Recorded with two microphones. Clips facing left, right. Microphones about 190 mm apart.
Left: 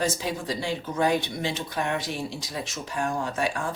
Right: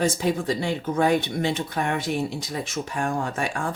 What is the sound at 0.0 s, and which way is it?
A man's voice, 55° right (ahead or behind).